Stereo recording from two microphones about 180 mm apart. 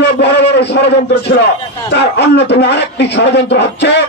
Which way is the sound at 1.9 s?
70° left (ahead or behind).